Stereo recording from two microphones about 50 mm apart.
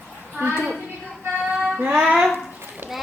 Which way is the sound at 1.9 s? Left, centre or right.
Centre.